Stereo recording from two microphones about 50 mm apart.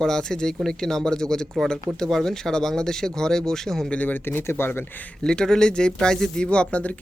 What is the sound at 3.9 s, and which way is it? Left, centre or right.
Speech, left.